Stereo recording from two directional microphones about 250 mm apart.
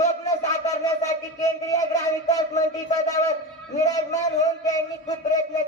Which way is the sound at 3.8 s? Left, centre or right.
Centre.